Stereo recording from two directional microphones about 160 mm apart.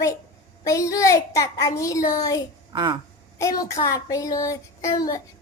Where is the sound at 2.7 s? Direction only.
30° right (ahead or behind).